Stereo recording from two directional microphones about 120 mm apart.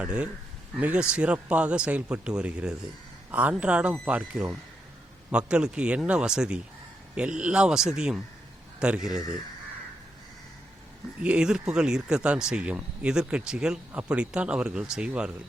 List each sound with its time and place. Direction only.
0.0 s speech: 10° right (ahead or behind)
11.2 s speech: 10° right (ahead or behind)